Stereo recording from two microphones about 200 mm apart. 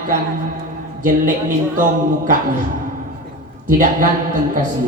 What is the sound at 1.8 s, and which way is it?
Speech, 40° right (ahead or behind).